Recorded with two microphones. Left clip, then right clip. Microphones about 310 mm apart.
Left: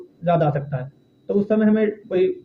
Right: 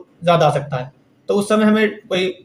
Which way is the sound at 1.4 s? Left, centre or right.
Centre.